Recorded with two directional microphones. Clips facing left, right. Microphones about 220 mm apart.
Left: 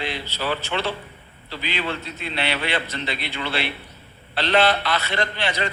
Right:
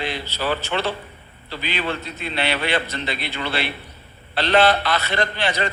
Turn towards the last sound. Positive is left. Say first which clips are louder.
# right 2 dB
turn(degrees=-45)  # may be behind; listen again after turning